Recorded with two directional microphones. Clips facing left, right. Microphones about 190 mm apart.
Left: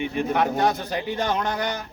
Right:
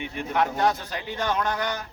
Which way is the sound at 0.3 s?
15° left (ahead or behind).